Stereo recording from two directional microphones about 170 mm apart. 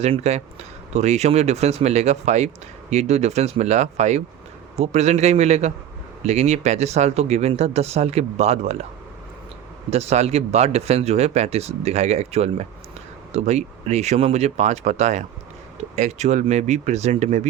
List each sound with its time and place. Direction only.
0.0 s speech: 40° right (ahead or behind)
9.9 s speech: 40° right (ahead or behind)